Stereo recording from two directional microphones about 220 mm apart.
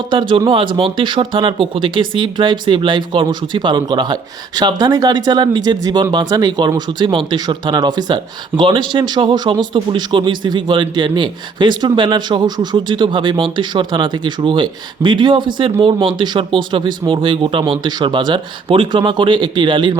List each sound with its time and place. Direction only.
0.1 s speech: 20° right (ahead or behind)